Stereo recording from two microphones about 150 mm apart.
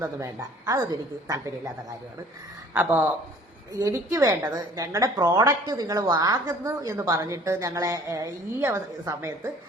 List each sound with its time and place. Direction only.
0.0 s a woman's voice: 20° right (ahead or behind)
3.7 s a woman's voice: 20° right (ahead or behind)